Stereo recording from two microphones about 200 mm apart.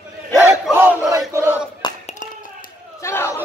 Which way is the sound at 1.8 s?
20° left (ahead or behind).